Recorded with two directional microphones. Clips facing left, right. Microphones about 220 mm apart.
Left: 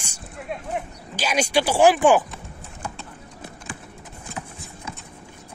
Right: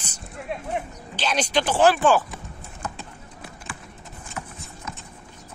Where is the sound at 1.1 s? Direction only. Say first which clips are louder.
Left 2 dB; 10° left (ahead or behind).